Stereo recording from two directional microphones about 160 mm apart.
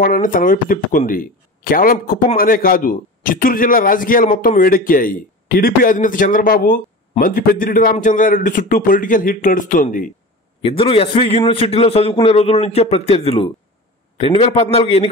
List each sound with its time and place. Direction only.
0.0 s speech: 60° left (ahead or behind)
10.6 s a man's voice: 35° left (ahead or behind)